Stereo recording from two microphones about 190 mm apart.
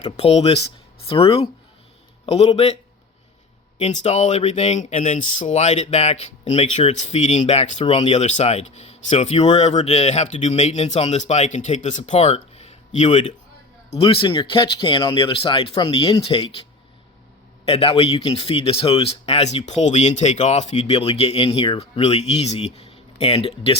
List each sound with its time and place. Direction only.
0.0 s speech: 35° left (ahead or behind)
3.8 s speech: 35° left (ahead or behind)
17.7 s speech: 30° left (ahead or behind)